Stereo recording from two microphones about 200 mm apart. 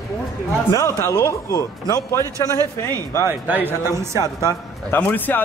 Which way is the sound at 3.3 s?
10° right (ahead or behind).